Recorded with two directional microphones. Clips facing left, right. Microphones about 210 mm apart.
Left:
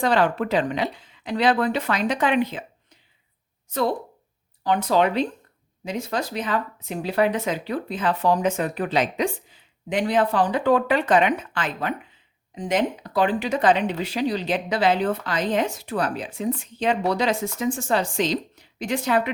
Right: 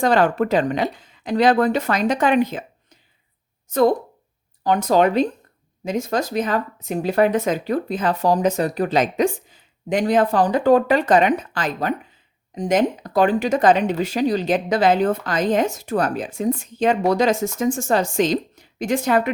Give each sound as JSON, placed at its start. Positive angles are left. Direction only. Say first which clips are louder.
{"t": 0.0, "sound": "speech", "louder": "right 4 dB", "side_deg": -45}
{"t": 3.7, "sound": "speech", "louder": "right 7 dB", "side_deg": -45}